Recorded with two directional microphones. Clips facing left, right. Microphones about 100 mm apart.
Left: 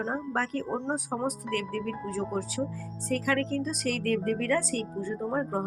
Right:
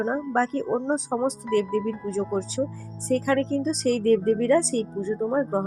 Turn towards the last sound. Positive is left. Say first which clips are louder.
# right 6 dB
turn(degrees=-25)  # may be behind; listen again after turning